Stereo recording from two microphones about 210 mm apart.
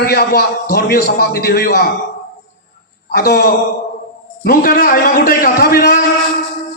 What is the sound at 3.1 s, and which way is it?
Speech, 50° left (ahead or behind).